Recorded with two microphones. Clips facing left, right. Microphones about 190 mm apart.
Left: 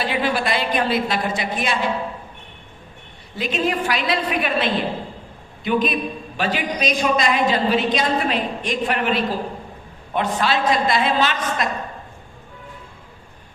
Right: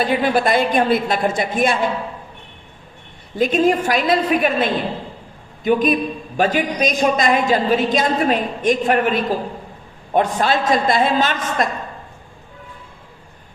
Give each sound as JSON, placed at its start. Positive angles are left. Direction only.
{"t": 0.0, "sound": "a man's voice", "side_deg": -45}
{"t": 3.3, "sound": "a man's voice", "side_deg": -45}